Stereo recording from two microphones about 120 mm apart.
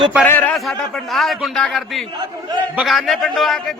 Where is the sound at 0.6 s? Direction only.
Centre (ahead or behind).